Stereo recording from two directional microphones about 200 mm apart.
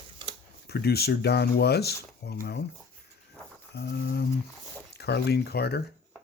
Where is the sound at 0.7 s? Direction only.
55° left (ahead or behind).